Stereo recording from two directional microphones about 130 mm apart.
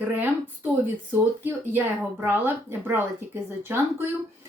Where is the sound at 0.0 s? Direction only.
15° right (ahead or behind).